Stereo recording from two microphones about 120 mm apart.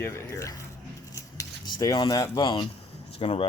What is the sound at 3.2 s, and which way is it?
Speech, 50° left (ahead or behind).